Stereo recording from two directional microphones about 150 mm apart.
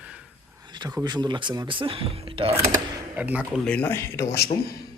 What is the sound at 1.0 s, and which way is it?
Speech, 30° right (ahead or behind).